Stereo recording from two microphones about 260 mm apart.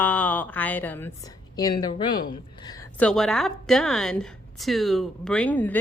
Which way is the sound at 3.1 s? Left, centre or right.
Centre.